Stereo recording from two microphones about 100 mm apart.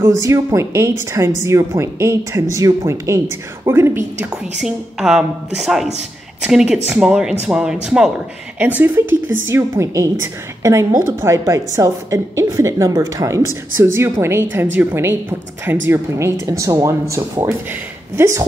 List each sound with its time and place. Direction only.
0.0 s a woman's voice: 30° right (ahead or behind)
4.6 s a woman's voice: 5° right (ahead or behind); by 18.4 s 30° right (ahead or behind)